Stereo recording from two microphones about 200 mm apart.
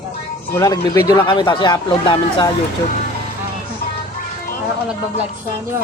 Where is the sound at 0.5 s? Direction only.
15° left (ahead or behind).